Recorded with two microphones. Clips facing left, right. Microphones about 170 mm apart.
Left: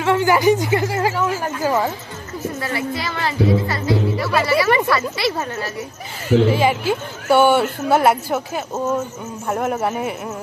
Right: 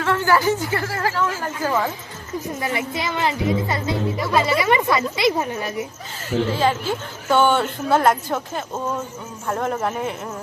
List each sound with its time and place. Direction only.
0.0 s a woman's voice: 15° left (ahead or behind)
2.6 s speech: 20° right (ahead or behind)
6.5 s a woman's voice: 10° left (ahead or behind)